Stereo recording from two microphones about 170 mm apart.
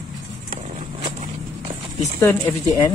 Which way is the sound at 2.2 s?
10° left (ahead or behind).